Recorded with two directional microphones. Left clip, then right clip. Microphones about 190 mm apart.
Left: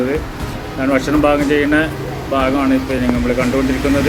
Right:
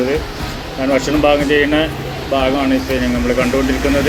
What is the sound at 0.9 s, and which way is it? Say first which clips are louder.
Speech: right 1 dB; 5° left (ahead or behind).